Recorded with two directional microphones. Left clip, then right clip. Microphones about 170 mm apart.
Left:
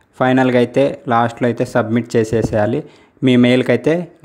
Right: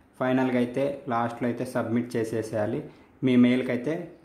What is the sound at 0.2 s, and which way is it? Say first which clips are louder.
Speech: left 12 dB; 45° left (ahead or behind).